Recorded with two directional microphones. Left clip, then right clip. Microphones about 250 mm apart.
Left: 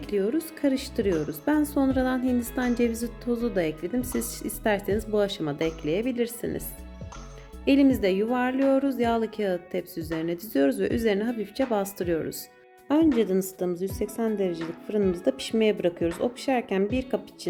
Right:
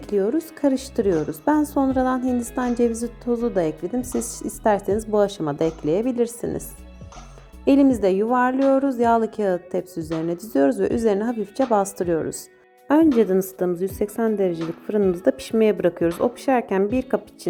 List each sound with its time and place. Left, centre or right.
0.0 s a woman's voice: centre
2.1 s a woman's voice: centre
7.6 s a woman's voice: centre